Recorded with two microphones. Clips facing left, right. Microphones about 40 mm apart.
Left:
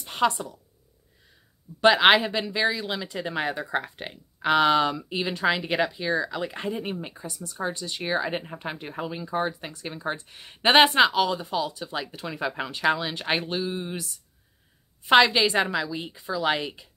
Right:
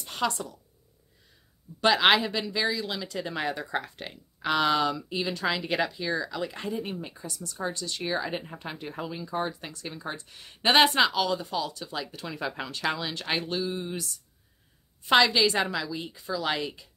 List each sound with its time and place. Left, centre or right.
0.0 s a sound: centre
1.8 s speech: left
15.0 s speech: left